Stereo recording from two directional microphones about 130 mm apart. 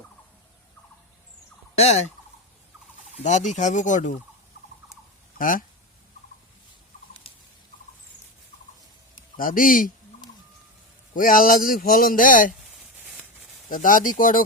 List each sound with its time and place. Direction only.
1.7 s turkey: 55° left (ahead or behind)
3.2 s speech: 70° left (ahead or behind)
5.4 s speech: 90° left
7.3 s a sound: 45° left (ahead or behind)
9.4 s a man's voice: 90° left
11.1 s a man's voice: 90° left
13.7 s a man's voice: 90° left